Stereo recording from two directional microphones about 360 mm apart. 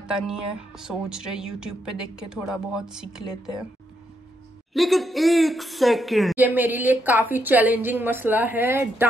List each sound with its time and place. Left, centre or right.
0.0 s speech: centre
4.7 s speech: centre